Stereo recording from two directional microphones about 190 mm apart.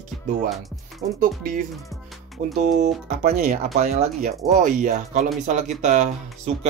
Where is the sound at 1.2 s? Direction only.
45° right (ahead or behind).